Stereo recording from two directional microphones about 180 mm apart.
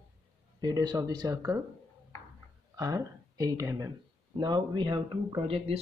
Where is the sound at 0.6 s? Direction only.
20° right (ahead or behind).